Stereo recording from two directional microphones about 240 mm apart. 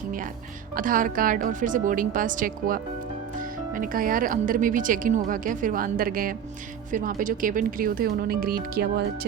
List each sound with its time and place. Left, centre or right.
0.8 s a woman's voice: right